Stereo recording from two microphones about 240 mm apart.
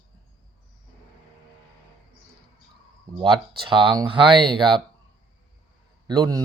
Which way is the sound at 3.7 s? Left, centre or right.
Right.